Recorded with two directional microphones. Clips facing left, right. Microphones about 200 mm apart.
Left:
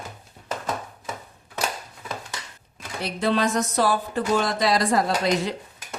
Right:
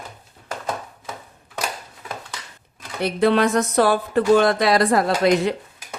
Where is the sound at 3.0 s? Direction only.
60° right (ahead or behind).